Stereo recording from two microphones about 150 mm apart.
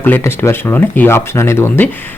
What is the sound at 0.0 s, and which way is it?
Speech, 15° left (ahead or behind).